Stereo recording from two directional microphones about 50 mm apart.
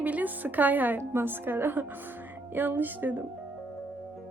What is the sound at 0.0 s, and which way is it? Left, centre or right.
Speech, right.